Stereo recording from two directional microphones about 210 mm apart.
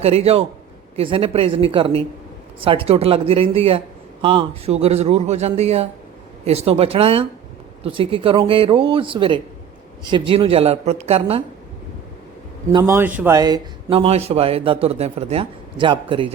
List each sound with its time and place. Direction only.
0.0 s a man's voice: 30° right (ahead or behind)
12.7 s a man's voice: 10° right (ahead or behind)